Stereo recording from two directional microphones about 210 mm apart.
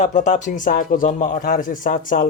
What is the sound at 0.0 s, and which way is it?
Speech, 35° left (ahead or behind).